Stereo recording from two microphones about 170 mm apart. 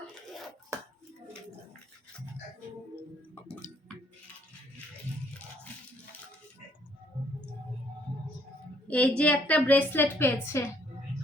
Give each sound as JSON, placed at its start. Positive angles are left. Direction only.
{"t": 8.9, "sound": "a woman's voice", "side_deg": 10}